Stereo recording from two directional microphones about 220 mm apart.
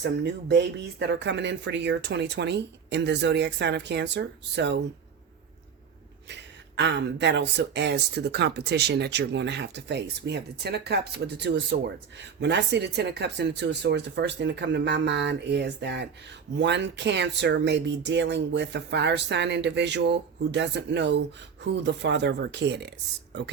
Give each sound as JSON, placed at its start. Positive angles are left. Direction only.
{"t": 0.0, "sound": "speech", "side_deg": -50}
{"t": 6.2, "sound": "speech", "side_deg": -50}